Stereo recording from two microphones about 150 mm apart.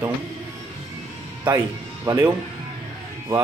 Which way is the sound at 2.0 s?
20° right (ahead or behind).